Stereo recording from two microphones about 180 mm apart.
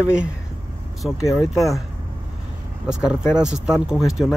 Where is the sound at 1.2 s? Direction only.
15° left (ahead or behind).